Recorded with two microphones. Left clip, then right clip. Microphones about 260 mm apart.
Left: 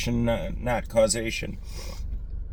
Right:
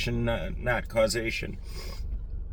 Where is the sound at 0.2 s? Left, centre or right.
Centre.